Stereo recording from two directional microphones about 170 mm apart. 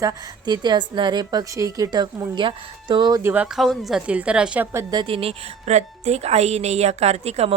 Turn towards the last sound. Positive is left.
turn(degrees=-40)  # may be behind; listen again after turning